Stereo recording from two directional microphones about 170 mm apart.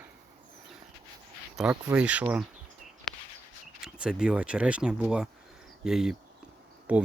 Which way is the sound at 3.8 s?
5° right (ahead or behind).